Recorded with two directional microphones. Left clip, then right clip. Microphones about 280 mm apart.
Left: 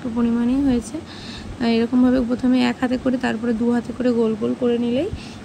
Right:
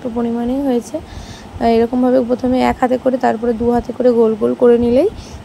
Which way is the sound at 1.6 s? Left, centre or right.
Centre.